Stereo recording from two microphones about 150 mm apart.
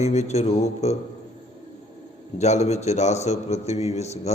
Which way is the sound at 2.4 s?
50° left (ahead or behind).